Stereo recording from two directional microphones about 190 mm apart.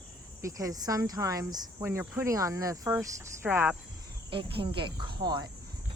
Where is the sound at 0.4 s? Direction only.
20° right (ahead or behind).